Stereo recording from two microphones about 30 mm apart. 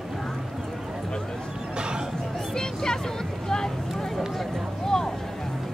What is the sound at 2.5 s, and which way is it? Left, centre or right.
Music, left.